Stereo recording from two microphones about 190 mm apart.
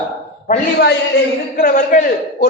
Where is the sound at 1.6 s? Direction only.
50° left (ahead or behind).